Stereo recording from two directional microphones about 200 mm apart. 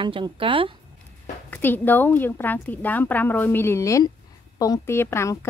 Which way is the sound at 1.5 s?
10° left (ahead or behind).